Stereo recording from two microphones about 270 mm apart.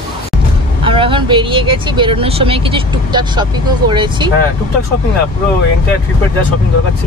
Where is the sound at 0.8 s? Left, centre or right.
Centre.